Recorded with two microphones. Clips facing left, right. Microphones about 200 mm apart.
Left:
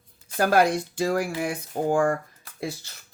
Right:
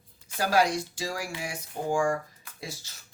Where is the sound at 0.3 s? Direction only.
55° left (ahead or behind).